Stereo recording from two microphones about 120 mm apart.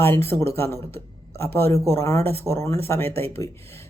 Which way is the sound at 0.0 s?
20° left (ahead or behind).